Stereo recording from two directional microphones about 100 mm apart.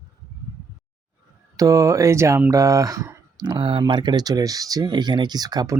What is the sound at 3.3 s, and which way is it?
Speech, 50° right (ahead or behind).